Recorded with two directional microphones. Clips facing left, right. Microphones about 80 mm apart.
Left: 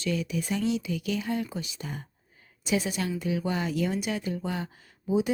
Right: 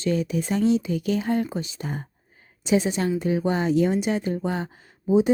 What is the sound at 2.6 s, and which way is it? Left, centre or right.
Speech, right.